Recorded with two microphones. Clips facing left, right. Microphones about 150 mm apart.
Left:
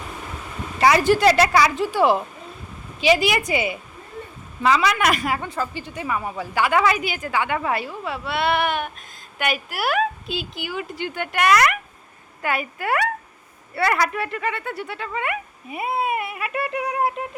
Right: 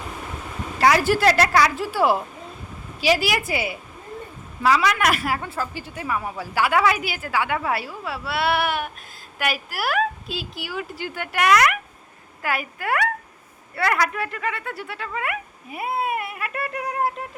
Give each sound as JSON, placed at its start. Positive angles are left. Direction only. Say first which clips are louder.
{"t": 0.8, "sound": "a woman's voice", "louder": "left 2 dB", "side_deg": 0}